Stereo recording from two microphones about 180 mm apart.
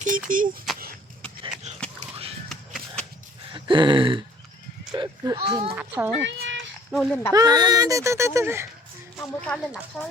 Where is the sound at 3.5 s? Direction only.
25° right (ahead or behind).